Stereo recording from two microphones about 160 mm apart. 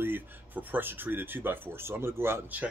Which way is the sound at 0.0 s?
10° right (ahead or behind).